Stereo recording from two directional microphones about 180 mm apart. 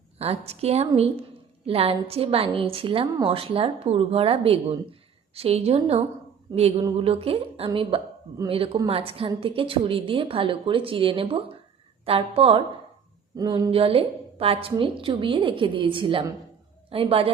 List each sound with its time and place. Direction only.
0.2 s a woman's voice: 35° right (ahead or behind)
13.3 s a woman's voice: 20° right (ahead or behind)